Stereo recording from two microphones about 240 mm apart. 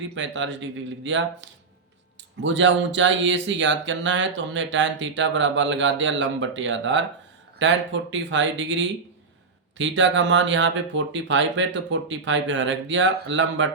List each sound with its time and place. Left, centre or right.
0.1 s speech: right